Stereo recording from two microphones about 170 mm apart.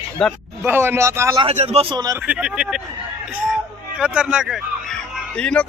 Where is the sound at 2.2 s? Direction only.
5° right (ahead or behind).